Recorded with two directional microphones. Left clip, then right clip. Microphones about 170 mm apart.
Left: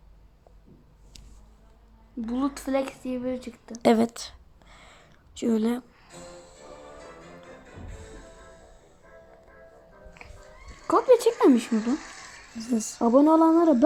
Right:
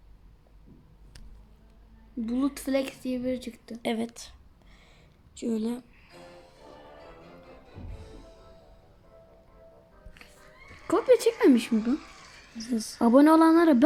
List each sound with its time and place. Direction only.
2.2 s speech: 10° right (ahead or behind)
3.8 s a woman's voice: 35° left (ahead or behind)
4.1 s a sound: 10° left (ahead or behind)
6.3 s music: 25° left (ahead or behind)
7.0 s music: 10° left (ahead or behind)
10.4 s cat: 10° left (ahead or behind)
11.1 s speech: 5° right (ahead or behind)
11.7 s speech: 25° left (ahead or behind)
13.0 s a sound: 35° right (ahead or behind)